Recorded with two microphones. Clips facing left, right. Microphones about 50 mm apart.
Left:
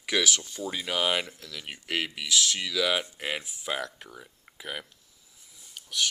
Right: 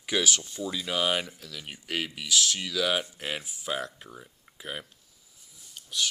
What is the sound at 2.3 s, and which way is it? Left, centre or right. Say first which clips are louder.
Speech: even; left.